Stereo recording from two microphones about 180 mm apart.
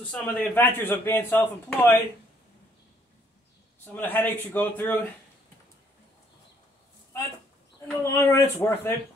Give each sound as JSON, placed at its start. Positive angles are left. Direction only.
{"t": 0.1, "sound": "a man's voice", "side_deg": 5}
{"t": 3.8, "sound": "a man's voice", "side_deg": 10}
{"t": 8.0, "sound": "a man's voice", "side_deg": 15}